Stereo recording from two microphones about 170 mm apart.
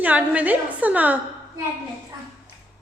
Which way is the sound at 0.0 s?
10° right (ahead or behind).